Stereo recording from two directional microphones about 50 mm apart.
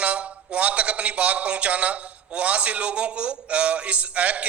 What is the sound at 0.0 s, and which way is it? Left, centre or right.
A man's voice, right.